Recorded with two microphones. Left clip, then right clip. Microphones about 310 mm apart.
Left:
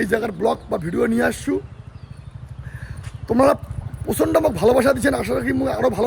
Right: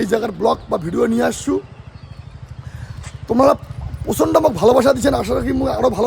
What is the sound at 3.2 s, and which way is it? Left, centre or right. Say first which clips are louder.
Speech: right 3 dB; centre.